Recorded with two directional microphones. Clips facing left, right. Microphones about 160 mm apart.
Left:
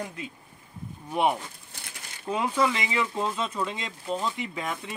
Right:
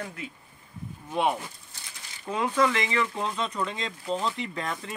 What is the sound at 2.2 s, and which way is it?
Speech, 10° left (ahead or behind).